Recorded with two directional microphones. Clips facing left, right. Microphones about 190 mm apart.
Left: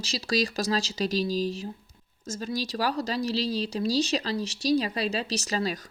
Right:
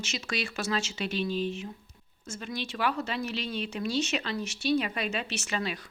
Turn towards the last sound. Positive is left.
turn(degrees=35)  # may be behind; listen again after turning